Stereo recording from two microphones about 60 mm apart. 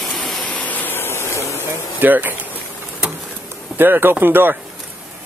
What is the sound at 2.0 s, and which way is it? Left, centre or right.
Speech, right.